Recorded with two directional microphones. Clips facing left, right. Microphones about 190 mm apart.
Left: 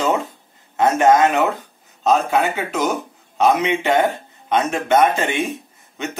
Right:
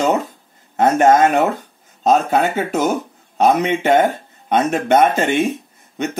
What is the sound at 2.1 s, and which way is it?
Speech, 40° right (ahead or behind).